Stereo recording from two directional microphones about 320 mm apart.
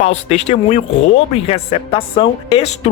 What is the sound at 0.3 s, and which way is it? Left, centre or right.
A woman's voice, centre.